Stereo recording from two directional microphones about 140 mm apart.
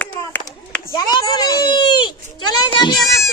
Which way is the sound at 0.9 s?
30° left (ahead or behind).